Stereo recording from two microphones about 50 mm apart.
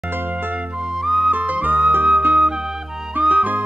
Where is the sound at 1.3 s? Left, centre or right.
Right.